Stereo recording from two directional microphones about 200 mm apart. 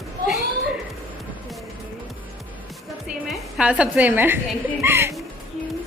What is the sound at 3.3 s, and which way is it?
A woman's voice, 5° right (ahead or behind).